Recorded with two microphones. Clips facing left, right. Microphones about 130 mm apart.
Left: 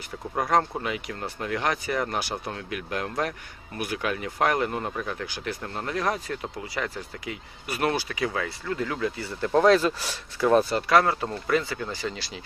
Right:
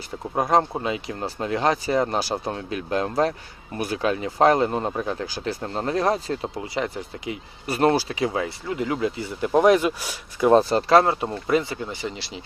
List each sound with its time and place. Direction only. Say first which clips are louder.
0.3 s speech: right 3 dB; 25° right (ahead or behind)
10.5 s speech: right 4 dB; 35° right (ahead or behind)